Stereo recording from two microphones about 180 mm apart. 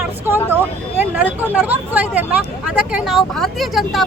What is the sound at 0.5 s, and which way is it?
Speech, 10° right (ahead or behind).